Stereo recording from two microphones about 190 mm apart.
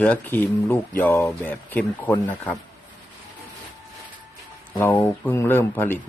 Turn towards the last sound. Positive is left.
turn(degrees=10)  # may be behind; listen again after turning